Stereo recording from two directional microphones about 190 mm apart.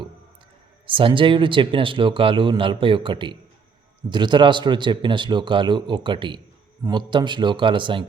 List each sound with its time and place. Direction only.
0.9 s speech: 25° right (ahead or behind)